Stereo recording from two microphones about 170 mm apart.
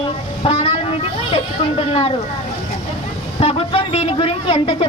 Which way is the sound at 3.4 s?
30° left (ahead or behind).